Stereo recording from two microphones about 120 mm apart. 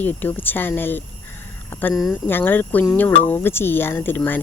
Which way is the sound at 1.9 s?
Centre (ahead or behind).